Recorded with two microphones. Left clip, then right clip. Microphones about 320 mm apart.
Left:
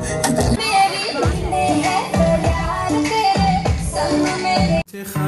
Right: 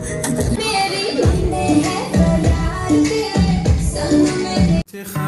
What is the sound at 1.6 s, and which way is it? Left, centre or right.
Music, left.